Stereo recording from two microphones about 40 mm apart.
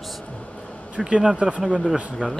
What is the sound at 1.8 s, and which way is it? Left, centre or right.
Speech, centre.